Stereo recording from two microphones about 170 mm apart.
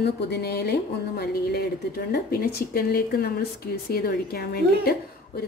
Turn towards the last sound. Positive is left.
turn(degrees=60)  # may be behind; listen again after turning